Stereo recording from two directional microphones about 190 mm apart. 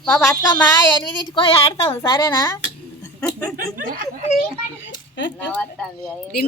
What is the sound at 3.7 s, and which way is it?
Speech, 50° right (ahead or behind).